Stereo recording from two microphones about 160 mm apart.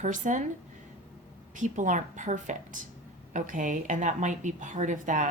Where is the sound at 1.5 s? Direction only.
55° right (ahead or behind).